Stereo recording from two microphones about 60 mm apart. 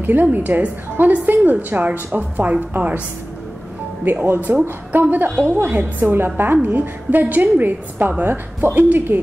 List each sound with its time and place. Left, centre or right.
0.0 s a woman's voice: right
4.0 s a woman's voice: right